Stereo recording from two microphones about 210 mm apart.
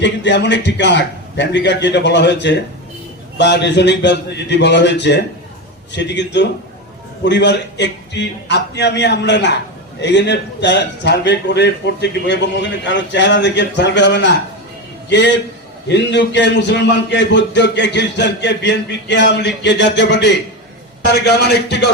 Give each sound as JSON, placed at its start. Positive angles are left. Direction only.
{"t": 0.0, "sound": "a man's voice", "side_deg": 55}